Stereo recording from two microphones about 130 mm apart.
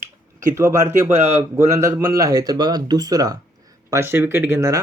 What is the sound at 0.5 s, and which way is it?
Speech, 20° right (ahead or behind).